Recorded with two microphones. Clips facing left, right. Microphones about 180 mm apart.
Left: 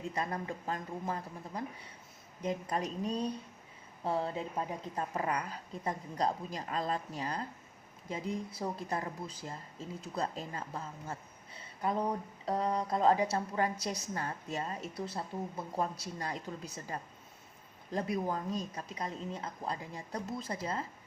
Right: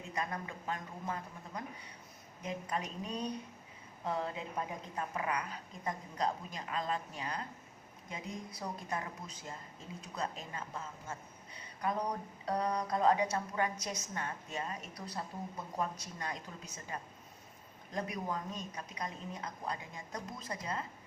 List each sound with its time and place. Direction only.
0.1 s speech: 35° left (ahead or behind)